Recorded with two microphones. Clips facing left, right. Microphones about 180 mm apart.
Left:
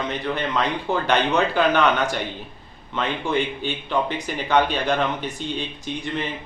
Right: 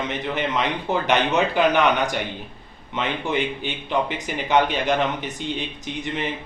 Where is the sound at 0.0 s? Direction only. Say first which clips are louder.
Even; 20° right (ahead or behind).